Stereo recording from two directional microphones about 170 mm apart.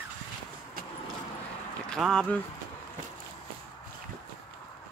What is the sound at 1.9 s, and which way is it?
Speech, 5° left (ahead or behind).